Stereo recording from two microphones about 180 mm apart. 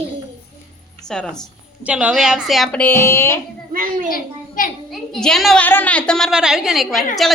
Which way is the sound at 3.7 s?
50° right (ahead or behind).